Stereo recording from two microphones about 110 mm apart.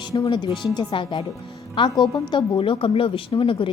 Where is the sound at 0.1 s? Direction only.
45° left (ahead or behind).